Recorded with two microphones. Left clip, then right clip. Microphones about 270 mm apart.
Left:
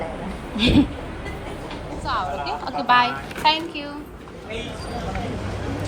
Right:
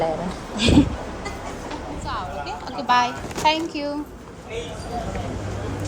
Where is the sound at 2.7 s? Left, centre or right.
Centre.